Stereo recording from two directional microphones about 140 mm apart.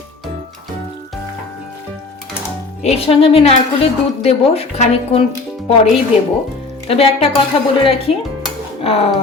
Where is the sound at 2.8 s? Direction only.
50° left (ahead or behind).